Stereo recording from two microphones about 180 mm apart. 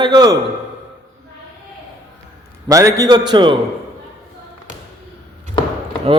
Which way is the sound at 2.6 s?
15° right (ahead or behind).